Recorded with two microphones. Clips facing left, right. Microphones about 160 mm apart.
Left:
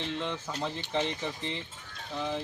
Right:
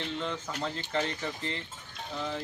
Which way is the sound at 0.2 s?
5° left (ahead or behind).